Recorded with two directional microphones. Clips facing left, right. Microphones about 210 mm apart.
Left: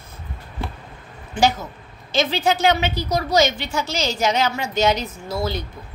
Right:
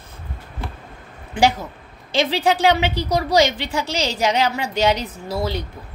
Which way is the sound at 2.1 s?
30° right (ahead or behind).